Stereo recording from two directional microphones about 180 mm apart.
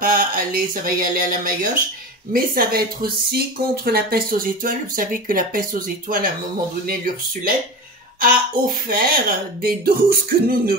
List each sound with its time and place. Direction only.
0.0 s speech: 50° right (ahead or behind)
8.2 s speech: 50° right (ahead or behind)